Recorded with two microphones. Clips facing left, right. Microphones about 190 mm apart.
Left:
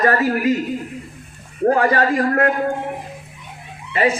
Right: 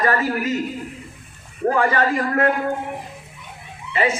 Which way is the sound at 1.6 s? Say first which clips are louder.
Left 3 dB; 40° left (ahead or behind).